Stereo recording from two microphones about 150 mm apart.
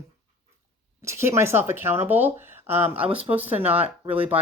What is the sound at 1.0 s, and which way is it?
Speech, 20° right (ahead or behind).